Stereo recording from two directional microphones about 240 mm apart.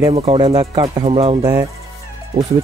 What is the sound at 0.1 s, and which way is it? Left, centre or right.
Speech, right.